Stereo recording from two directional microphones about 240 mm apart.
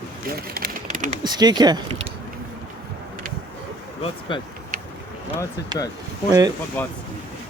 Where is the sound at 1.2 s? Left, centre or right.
Centre.